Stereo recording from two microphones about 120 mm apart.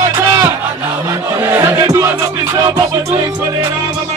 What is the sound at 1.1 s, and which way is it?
Music, 20° right (ahead or behind).